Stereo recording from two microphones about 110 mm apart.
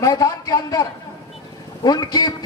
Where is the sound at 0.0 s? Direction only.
30° left (ahead or behind).